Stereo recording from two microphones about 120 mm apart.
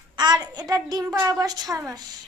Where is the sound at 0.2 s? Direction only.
35° right (ahead or behind).